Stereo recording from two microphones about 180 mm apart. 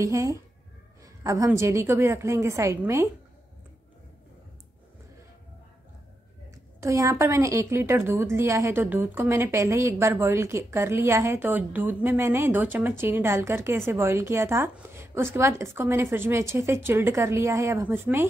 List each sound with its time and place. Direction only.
0.0 s a woman's voice: 15° right (ahead or behind)
6.8 s a woman's voice: 15° right (ahead or behind)